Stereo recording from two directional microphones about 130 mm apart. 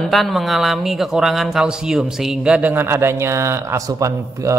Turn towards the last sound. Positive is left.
turn(degrees=-25)  # may be behind; listen again after turning